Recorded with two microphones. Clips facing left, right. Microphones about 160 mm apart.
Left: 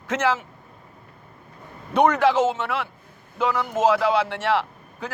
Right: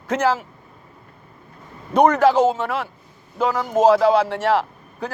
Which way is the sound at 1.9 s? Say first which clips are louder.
Right 3 dB; 40° right (ahead or behind).